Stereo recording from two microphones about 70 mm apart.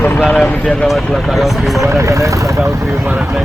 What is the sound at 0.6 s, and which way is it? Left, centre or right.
Speech, centre.